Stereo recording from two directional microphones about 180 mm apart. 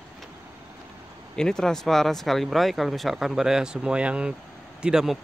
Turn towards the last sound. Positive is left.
turn(degrees=-5)  # may be behind; listen again after turning